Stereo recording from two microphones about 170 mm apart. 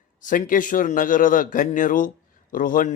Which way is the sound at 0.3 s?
50° left (ahead or behind).